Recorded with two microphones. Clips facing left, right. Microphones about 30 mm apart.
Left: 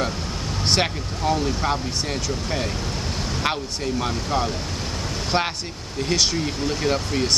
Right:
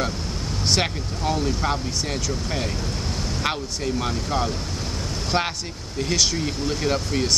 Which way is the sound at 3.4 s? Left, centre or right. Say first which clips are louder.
Left 1 dB; centre.